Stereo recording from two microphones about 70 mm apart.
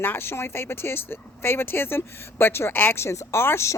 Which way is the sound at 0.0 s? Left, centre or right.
Left.